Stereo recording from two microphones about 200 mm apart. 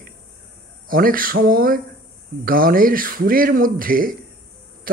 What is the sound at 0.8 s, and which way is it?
Speech, 45° right (ahead or behind).